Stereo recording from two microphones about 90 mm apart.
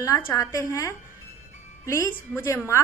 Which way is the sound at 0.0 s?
35° left (ahead or behind).